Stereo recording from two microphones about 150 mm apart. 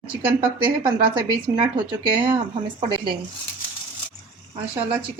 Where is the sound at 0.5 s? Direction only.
35° right (ahead or behind).